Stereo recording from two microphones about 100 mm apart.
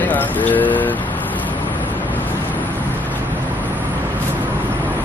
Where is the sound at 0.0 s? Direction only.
15° left (ahead or behind).